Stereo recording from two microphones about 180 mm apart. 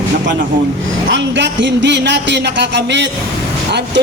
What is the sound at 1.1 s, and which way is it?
Speech, 80° right.